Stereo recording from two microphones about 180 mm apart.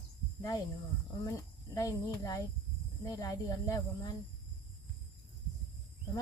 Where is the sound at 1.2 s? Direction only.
20° left (ahead or behind).